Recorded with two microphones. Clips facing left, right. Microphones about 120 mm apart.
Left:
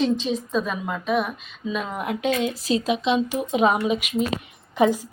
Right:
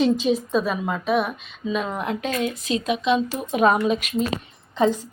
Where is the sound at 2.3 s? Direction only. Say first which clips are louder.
Left 1 dB; 25° left (ahead or behind).